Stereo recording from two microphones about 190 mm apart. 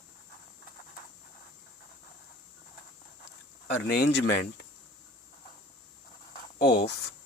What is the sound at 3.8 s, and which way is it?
Speech, 60° left (ahead or behind).